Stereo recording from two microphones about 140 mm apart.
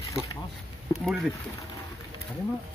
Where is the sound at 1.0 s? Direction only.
Centre (ahead or behind).